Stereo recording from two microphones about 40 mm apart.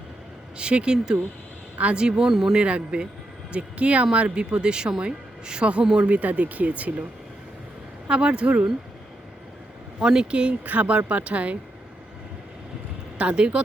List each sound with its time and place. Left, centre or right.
0.5 s speech: right
6.1 s speech: right
8.0 s speech: right
10.0 s speech: right
10.7 s speech: right
13.1 s speech: right